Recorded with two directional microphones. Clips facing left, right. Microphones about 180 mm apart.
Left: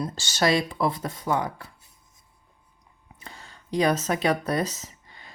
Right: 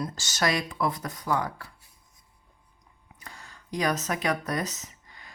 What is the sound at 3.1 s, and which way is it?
Speech, 25° left (ahead or behind).